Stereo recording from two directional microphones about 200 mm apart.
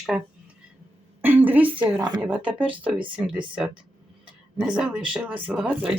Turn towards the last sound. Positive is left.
turn(degrees=-5)  # may be behind; listen again after turning